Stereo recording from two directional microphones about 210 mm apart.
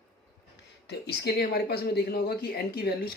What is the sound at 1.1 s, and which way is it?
Speech, 50° left (ahead or behind).